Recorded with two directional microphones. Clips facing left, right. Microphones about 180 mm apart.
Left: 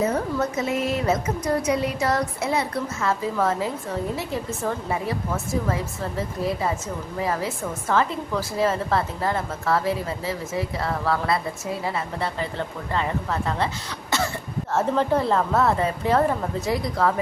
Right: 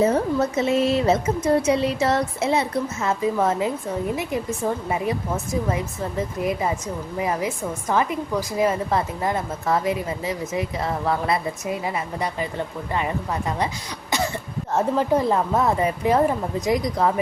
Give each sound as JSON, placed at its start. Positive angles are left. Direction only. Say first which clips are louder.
{"t": 0.0, "sound": "a woman's voice", "louder": "right 4 dB", "side_deg": -30}
{"t": 14.7, "sound": "a woman's voice", "louder": "right 1 dB", "side_deg": -15}